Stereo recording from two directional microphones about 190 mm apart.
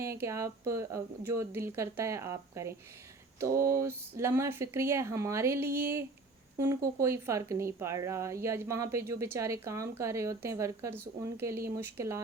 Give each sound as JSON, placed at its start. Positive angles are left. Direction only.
{"t": 0.0, "sound": "speech", "side_deg": -15}